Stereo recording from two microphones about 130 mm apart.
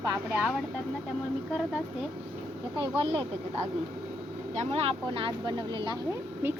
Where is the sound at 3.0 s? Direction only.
50° right (ahead or behind).